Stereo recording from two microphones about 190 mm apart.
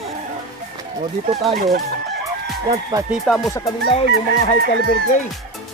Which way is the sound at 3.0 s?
Centre (ahead or behind).